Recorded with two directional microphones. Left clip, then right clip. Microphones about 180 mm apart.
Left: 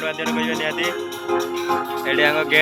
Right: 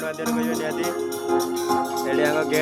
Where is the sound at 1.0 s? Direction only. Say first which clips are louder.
Right 1 dB; 90° right.